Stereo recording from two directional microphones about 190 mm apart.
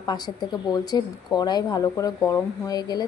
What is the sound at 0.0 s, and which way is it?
Speech, 20° left (ahead or behind).